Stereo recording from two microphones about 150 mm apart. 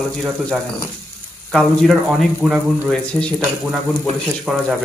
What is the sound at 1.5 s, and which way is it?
Speech, centre (ahead or behind).